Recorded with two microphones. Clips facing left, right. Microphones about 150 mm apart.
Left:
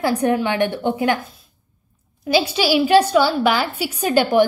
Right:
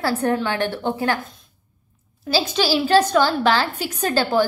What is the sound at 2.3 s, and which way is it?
A woman's voice, 15° left (ahead or behind).